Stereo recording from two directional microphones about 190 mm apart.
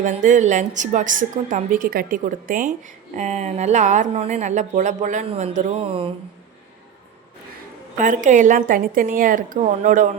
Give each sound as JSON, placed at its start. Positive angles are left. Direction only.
{"t": 0.0, "sound": "a woman's voice", "side_deg": -40}
{"t": 7.9, "sound": "speech", "side_deg": -40}